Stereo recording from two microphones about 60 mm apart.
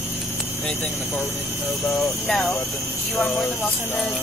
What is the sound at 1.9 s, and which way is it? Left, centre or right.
Speech, centre.